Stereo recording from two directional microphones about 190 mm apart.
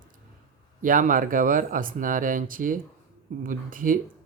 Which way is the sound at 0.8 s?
45° right (ahead or behind).